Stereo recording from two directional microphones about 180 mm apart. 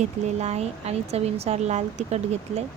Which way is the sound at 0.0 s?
40° right (ahead or behind).